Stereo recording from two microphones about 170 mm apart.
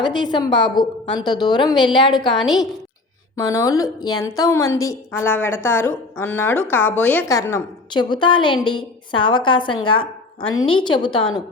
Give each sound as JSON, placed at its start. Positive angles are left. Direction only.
{"t": 0.0, "sound": "a woman's voice", "side_deg": 25}
{"t": 2.3, "sound": "a woman's voice", "side_deg": 0}
{"t": 3.3, "sound": "a woman's voice", "side_deg": 20}
{"t": 7.9, "sound": "a woman's voice", "side_deg": 25}